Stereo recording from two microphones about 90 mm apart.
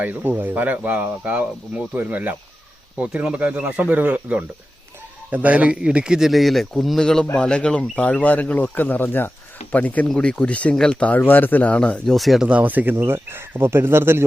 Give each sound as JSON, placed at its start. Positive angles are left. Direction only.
{"t": 0.0, "sound": "speech", "side_deg": -20}
{"t": 12.1, "sound": "speech", "side_deg": 0}
{"t": 12.5, "sound": "speech", "side_deg": -15}